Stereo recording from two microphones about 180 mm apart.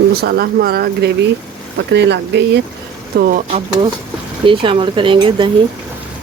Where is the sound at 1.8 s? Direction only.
75° right (ahead or behind).